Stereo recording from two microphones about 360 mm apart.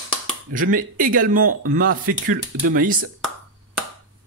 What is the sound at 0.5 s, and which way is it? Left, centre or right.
Speech, right.